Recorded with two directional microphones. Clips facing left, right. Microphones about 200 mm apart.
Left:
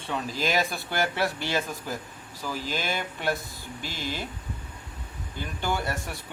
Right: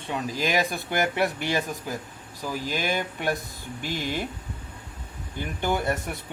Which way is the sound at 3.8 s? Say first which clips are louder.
Right 5 dB; 20° right (ahead or behind).